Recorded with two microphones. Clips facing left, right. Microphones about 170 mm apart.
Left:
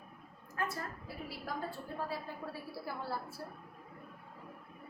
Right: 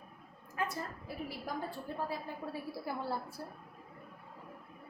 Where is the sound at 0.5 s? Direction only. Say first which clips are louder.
Right 1 dB; 20° right (ahead or behind).